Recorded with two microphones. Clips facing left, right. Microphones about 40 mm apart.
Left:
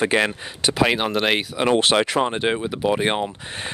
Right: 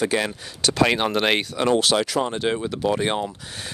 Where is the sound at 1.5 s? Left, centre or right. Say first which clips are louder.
Left 4 dB; left.